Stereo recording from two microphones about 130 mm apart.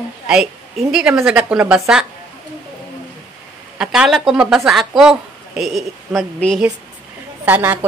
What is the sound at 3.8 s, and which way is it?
A woman's voice, 5° right (ahead or behind).